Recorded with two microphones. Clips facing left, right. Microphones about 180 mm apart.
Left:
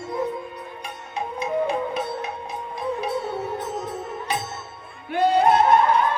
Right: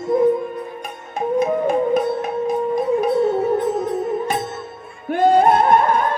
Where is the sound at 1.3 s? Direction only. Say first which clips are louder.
Right 6 dB; 50° right (ahead or behind).